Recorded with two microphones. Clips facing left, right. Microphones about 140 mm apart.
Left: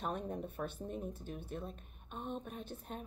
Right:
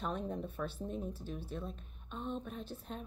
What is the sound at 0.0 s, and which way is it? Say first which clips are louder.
Speech: right 1 dB; 50° left (ahead or behind).